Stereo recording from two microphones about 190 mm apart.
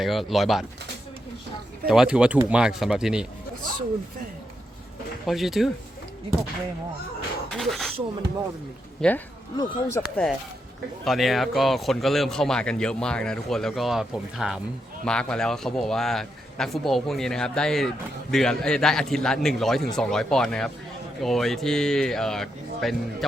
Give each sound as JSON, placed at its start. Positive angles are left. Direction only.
{"t": 0.0, "sound": "a man's voice", "side_deg": 0}
{"t": 1.9, "sound": "a man's voice", "side_deg": -5}
{"t": 5.2, "sound": "a man's voice", "side_deg": 0}
{"t": 7.5, "sound": "speech", "side_deg": 0}
{"t": 9.0, "sound": "speech", "side_deg": 10}
{"t": 9.6, "sound": "speech", "side_deg": 20}
{"t": 10.0, "sound": "a man's voice", "side_deg": 0}